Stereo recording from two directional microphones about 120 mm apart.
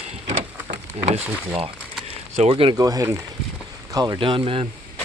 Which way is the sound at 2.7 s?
30° right (ahead or behind).